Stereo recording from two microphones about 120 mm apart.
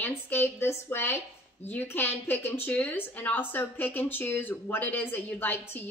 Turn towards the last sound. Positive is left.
turn(degrees=15)  # may be behind; listen again after turning